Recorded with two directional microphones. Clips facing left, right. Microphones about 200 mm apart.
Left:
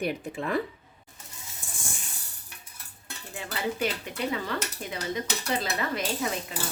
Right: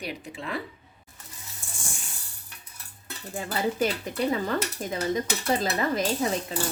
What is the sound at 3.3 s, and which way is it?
Speech, 40° right (ahead or behind).